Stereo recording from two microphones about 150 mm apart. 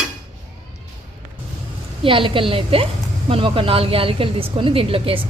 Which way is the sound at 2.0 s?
35° right (ahead or behind).